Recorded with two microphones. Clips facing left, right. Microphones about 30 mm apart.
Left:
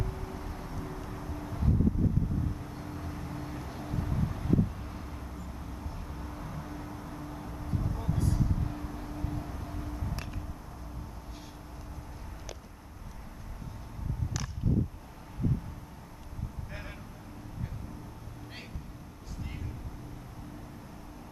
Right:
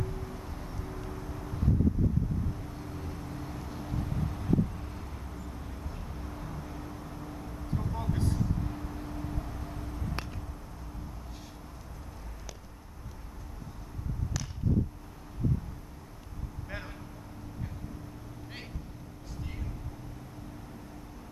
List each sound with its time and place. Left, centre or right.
0.0 s vehicle: centre
8.1 s vehicle: right
8.4 s vehicle: centre